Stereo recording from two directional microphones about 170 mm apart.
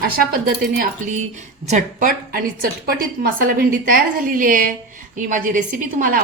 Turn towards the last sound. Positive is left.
turn(degrees=-55)  # may be behind; listen again after turning